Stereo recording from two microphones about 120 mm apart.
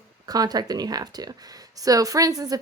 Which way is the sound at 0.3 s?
35° right (ahead or behind).